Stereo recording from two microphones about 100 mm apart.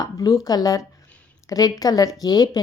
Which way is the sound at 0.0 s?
35° left (ahead or behind).